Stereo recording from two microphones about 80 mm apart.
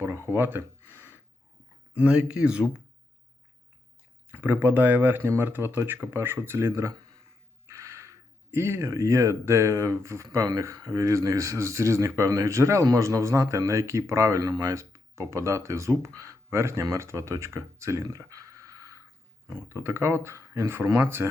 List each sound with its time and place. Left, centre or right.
0.3 s a sound: right
1.9 s speech: centre
4.3 s speech: right